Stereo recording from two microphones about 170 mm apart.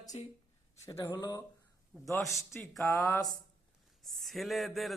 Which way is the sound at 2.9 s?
20° left (ahead or behind).